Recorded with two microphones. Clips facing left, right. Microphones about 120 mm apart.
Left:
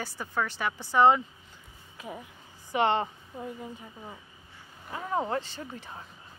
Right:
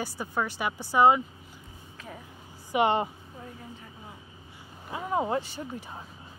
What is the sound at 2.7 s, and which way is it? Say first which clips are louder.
Speech: right 1 dB; 10° right (ahead or behind).